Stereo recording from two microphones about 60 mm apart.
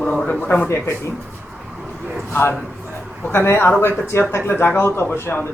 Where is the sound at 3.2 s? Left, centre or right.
Left.